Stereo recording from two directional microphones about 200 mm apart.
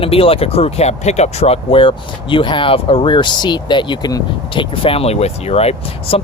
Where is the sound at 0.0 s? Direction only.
30° left (ahead or behind).